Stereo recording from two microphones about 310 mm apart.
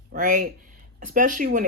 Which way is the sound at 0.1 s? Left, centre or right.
Right.